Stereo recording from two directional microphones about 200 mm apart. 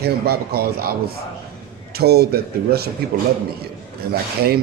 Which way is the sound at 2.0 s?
50° right (ahead or behind).